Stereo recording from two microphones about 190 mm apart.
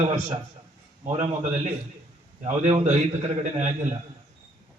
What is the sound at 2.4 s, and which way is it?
A man's voice, 35° right (ahead or behind).